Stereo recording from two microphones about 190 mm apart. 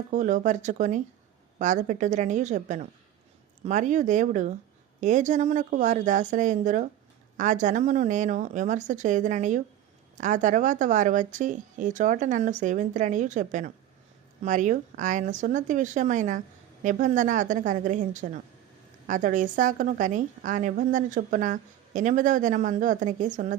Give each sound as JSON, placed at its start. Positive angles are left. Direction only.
{"t": 0.1, "sound": "a woman's voice", "side_deg": -40}